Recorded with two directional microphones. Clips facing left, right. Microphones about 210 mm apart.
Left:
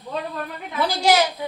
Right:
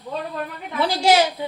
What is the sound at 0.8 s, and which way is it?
Speech, 25° right (ahead or behind).